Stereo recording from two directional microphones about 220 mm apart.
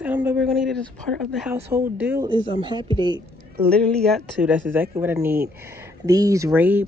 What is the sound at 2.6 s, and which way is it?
Speech, 20° right (ahead or behind).